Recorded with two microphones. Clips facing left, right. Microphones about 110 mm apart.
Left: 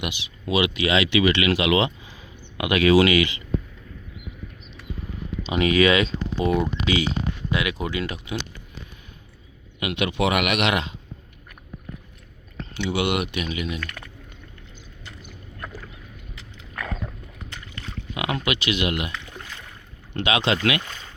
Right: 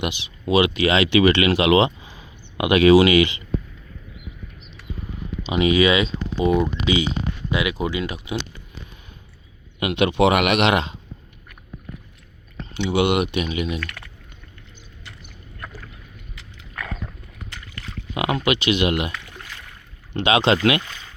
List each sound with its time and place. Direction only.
0.0 s speech: 30° right (ahead or behind)
5.5 s speech: 10° right (ahead or behind)
9.8 s speech: 30° right (ahead or behind)
12.7 s speech: 20° right (ahead or behind)
14.0 s a sound: 20° left (ahead or behind)
16.7 s a sound: 15° left (ahead or behind)
18.1 s speech: 30° right (ahead or behind)
19.2 s boat: 25° left (ahead or behind)
20.1 s speech: 30° right (ahead or behind)